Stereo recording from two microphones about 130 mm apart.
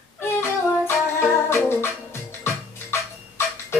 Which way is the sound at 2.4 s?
20° left (ahead or behind).